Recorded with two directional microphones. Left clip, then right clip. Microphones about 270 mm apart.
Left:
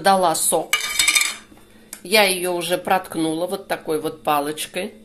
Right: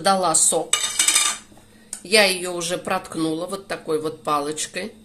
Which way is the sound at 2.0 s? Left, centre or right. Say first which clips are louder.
Left 1 dB; centre.